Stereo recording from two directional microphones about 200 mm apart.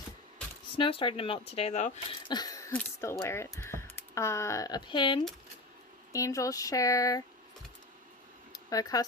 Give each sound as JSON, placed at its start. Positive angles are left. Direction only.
{"t": 0.8, "sound": "speech", "side_deg": 25}
{"t": 2.2, "sound": "speech", "side_deg": 20}
{"t": 8.5, "sound": "speech", "side_deg": 20}